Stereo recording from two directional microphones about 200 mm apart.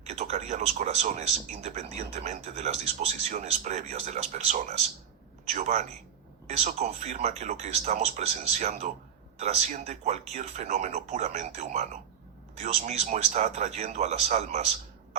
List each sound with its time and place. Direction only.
0.0 s speech: 35° right (ahead or behind)